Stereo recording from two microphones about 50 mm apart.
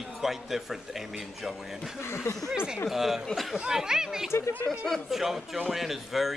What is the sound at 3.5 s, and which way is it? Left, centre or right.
Speech, centre.